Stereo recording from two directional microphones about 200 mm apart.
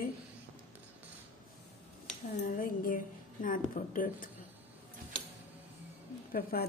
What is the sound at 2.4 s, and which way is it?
A woman's voice, 45° left (ahead or behind).